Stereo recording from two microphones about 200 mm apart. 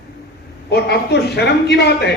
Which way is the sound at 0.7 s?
55° left (ahead or behind).